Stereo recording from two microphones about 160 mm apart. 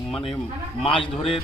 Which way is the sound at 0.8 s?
35° left (ahead or behind).